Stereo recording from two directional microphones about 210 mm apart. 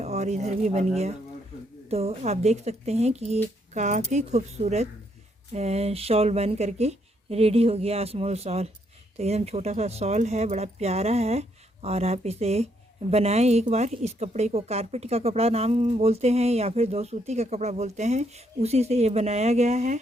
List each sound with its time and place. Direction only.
0.0 s speech: 30° right (ahead or behind)
1.9 s speech: 30° right (ahead or behind)